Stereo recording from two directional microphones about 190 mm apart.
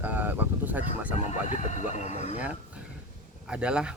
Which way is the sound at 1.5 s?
40° left (ahead or behind).